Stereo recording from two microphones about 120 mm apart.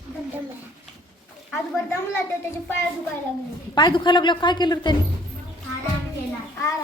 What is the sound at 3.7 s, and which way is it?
A woman's voice, 40° left (ahead or behind).